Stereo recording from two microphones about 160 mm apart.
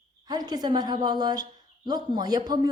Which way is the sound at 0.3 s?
25° right (ahead or behind).